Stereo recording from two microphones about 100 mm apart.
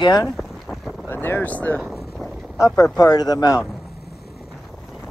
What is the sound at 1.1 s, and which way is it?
Speech, 20° left (ahead or behind).